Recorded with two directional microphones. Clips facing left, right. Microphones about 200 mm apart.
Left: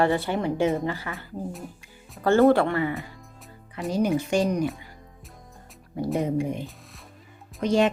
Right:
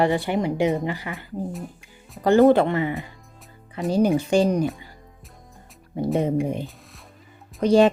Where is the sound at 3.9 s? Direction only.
30° right (ahead or behind).